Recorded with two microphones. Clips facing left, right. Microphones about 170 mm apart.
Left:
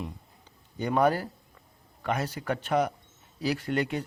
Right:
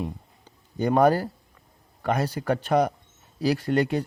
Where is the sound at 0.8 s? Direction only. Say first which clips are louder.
Right 5 dB; 40° right (ahead or behind).